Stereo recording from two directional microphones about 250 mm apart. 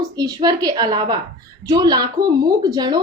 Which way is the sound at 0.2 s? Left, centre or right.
Centre.